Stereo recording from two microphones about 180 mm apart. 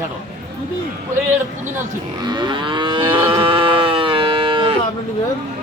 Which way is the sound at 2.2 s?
25° right (ahead or behind).